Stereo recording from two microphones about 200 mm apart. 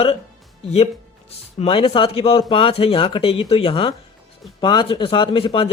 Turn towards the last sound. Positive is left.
turn(degrees=25)  # may be behind; listen again after turning